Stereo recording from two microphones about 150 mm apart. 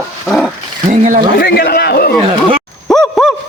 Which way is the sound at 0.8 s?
50° right (ahead or behind).